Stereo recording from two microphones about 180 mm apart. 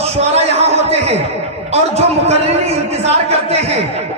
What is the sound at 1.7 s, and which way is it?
A man's voice, 35° right (ahead or behind).